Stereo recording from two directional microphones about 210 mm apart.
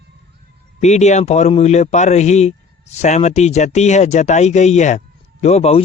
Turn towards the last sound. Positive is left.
turn(degrees=30)  # may be behind; listen again after turning